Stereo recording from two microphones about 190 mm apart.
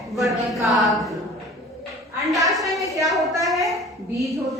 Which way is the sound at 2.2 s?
Centre (ahead or behind).